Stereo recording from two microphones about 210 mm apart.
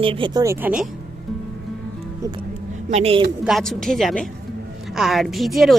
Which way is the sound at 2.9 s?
25° right (ahead or behind).